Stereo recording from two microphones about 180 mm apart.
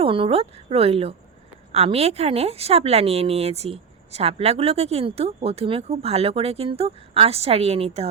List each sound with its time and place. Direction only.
0.0 s a woman's voice: 30° right (ahead or behind)